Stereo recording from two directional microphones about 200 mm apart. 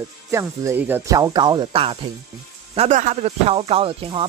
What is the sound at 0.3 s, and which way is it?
Speech, 15° right (ahead or behind).